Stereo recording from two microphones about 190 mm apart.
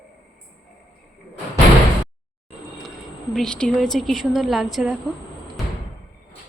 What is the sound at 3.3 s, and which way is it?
A woman's voice, 5° left (ahead or behind).